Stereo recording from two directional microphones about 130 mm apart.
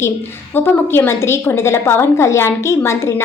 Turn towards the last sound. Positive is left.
turn(degrees=20)  # may be behind; listen again after turning